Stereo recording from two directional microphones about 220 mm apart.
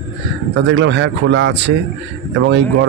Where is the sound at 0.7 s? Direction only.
55° right (ahead or behind).